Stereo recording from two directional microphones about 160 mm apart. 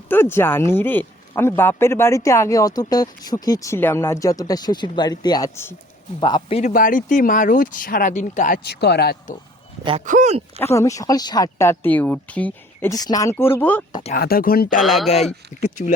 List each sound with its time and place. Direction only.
0.1 s a man's voice: 15° left (ahead or behind)
6.5 s speech: 45° left (ahead or behind)
8.5 s speech: 85° left
10.0 s speech: 50° right (ahead or behind)
10.6 s a man's voice: 15° left (ahead or behind)
12.9 s a man's voice: 25° left (ahead or behind)
14.1 s speech: 70° left (ahead or behind)
14.8 s speech: centre (ahead or behind)
15.8 s speech: 50° left (ahead or behind)